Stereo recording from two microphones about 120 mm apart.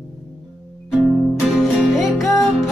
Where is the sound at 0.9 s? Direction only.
5° right (ahead or behind).